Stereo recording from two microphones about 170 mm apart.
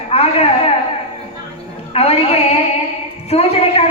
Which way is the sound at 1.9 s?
35° left (ahead or behind).